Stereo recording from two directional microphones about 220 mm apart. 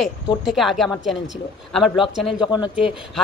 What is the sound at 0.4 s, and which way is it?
A woman's voice, centre (ahead or behind).